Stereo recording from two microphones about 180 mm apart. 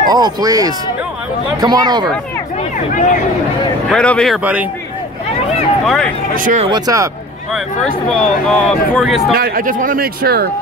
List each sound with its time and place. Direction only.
0.1 s speech: 20° right (ahead or behind)
3.9 s speech: 5° left (ahead or behind)
4.4 s speech: 10° right (ahead or behind)
5.9 s speech: 5° left (ahead or behind)
6.3 s speech: 45° right (ahead or behind)
6.7 s speech: 20° right (ahead or behind)
7.5 s speech: 5° left (ahead or behind)
9.3 s speech: 55° right (ahead or behind)